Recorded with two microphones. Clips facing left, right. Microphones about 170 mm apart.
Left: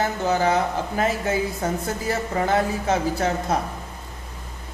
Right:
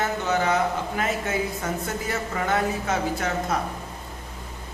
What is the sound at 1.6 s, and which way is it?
Speech, 30° left (ahead or behind).